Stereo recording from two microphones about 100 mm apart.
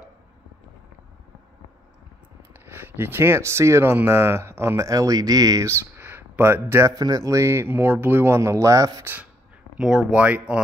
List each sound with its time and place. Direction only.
2.6 s speech: 20° right (ahead or behind)
5.9 s a sound: 20° right (ahead or behind)
7.0 s speech: 40° right (ahead or behind)
9.0 s speech: 15° right (ahead or behind)
9.8 s speech: 5° right (ahead or behind)